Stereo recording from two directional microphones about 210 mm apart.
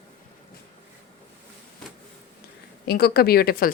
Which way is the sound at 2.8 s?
50° left (ahead or behind).